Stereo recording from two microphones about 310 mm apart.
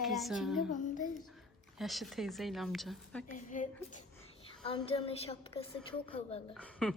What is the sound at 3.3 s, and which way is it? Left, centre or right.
A woman's voice, left.